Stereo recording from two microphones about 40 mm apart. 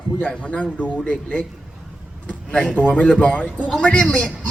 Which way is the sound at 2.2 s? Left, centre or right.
Left.